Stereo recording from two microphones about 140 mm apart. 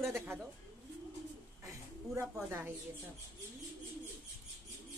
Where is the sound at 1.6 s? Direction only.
20° right (ahead or behind).